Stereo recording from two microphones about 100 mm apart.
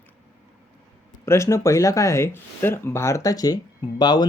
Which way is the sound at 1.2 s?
30° left (ahead or behind).